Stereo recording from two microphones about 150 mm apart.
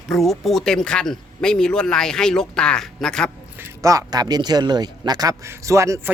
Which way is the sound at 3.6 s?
20° right (ahead or behind).